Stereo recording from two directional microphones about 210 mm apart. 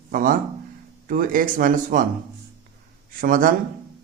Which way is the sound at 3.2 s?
40° right (ahead or behind).